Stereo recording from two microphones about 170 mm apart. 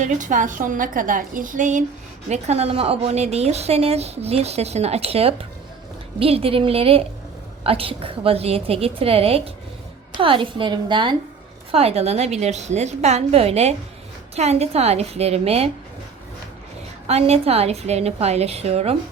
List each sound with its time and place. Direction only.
0.0 s a woman's voice: 50° right (ahead or behind)
17.1 s a woman's voice: 40° right (ahead or behind)